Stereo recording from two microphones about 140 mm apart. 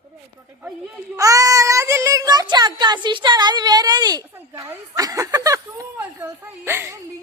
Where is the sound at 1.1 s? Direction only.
25° right (ahead or behind).